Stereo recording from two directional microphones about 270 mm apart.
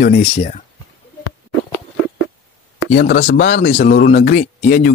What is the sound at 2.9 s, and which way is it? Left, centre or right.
Speech, left.